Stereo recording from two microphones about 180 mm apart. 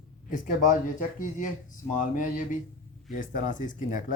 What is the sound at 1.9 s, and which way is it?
Speech, 45° left (ahead or behind).